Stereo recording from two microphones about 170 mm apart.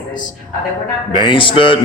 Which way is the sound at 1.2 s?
30° left (ahead or behind).